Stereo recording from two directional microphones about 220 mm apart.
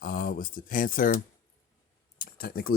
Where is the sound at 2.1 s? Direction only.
40° left (ahead or behind).